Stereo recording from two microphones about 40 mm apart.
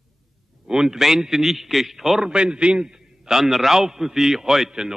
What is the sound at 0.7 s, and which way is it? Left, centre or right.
A man's voice, centre.